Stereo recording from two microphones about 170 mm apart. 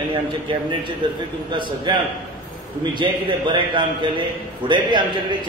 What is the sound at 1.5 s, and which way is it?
A man's voice, 30° right (ahead or behind).